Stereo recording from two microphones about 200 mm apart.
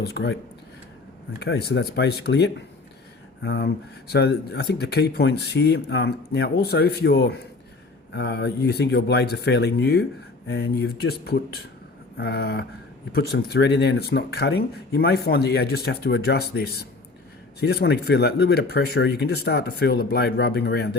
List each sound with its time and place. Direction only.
0.0 s speech: 55° left (ahead or behind)
1.4 s speech: 55° left (ahead or behind)
12.1 s speech: 50° left (ahead or behind)